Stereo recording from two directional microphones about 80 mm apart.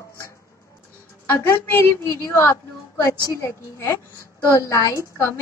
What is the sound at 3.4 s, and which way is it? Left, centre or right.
A woman's voice, left.